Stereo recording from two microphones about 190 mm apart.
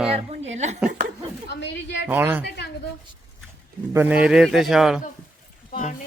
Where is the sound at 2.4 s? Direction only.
60° left (ahead or behind).